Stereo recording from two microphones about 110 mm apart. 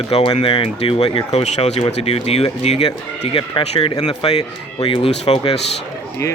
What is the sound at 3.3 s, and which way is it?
Speech, 55° left (ahead or behind).